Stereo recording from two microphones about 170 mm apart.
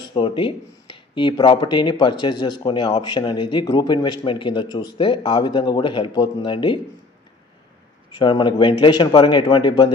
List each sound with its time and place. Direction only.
0.1 s speech: 30° left (ahead or behind)
8.2 s speech: 25° left (ahead or behind)